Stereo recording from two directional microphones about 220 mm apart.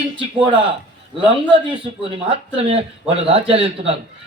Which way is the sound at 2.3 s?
25° right (ahead or behind).